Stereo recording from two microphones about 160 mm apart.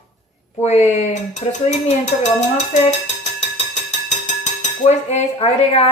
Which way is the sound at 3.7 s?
50° left (ahead or behind).